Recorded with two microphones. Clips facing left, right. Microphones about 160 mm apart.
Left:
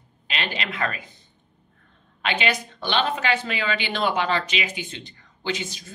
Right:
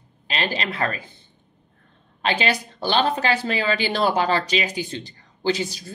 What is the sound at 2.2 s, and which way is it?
Speech, 35° right (ahead or behind).